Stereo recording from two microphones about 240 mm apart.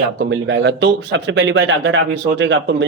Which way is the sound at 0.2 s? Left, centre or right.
Right.